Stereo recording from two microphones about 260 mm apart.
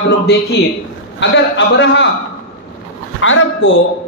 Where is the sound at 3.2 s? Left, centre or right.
Left.